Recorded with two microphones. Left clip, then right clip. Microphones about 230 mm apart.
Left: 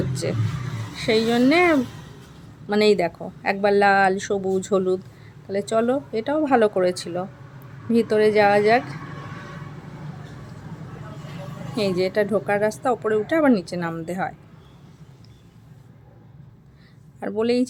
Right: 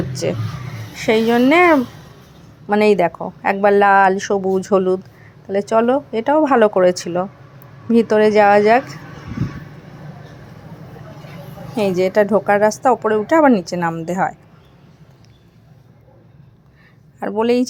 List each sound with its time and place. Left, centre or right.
0.9 s a woman's voice: centre
11.8 s a woman's voice: centre
17.2 s speech: centre